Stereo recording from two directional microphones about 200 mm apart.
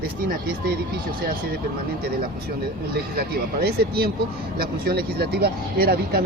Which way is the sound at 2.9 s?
50° right (ahead or behind).